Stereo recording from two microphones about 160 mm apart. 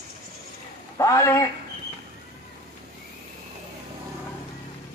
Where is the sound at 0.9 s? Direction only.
20° left (ahead or behind).